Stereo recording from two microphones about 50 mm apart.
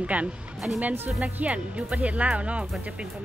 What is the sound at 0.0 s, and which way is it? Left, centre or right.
A woman's voice, right.